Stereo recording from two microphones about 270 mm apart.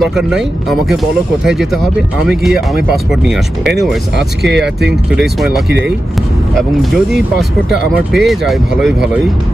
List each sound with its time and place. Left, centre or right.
0.0 s speech: centre
4.4 s speech: right
5.1 s speech: centre
6.8 s speech: centre